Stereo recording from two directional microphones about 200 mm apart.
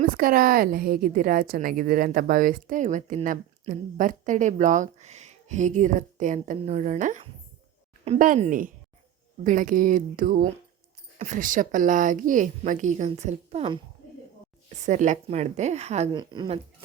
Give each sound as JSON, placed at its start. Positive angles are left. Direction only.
{"t": 0.0, "sound": "a woman's voice", "side_deg": -45}
{"t": 16.1, "sound": "a woman's voice", "side_deg": -20}